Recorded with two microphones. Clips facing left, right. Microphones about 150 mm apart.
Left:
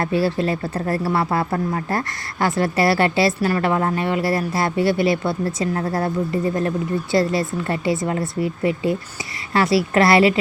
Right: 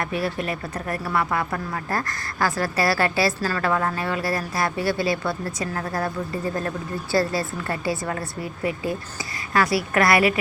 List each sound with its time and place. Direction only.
0.0 s speech: 30° left (ahead or behind)